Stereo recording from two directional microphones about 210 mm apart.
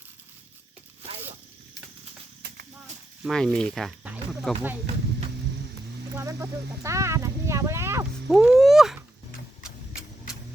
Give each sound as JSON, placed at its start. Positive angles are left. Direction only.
{"t": 3.2, "sound": "speech", "side_deg": 0}
{"t": 6.1, "sound": "speech", "side_deg": -15}